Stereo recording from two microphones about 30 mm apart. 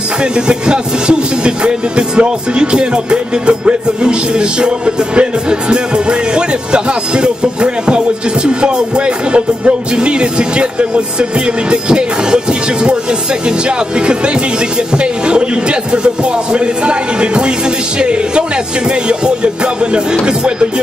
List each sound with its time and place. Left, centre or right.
0.2 s speech: right
13.7 s speech: right